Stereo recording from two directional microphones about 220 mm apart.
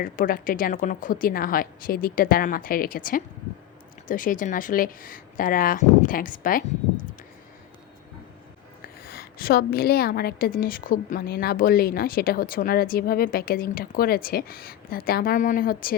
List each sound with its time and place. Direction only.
0.0 s a woman's voice: 40° left (ahead or behind)
8.8 s a woman's voice: 45° left (ahead or behind)